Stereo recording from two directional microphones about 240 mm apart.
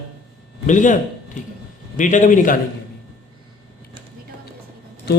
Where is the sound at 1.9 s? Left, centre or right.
Left.